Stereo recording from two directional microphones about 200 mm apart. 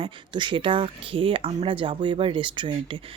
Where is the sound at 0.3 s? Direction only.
25° right (ahead or behind).